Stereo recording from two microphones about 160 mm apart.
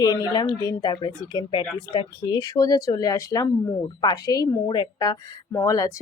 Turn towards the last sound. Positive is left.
turn(degrees=20)  # may be behind; listen again after turning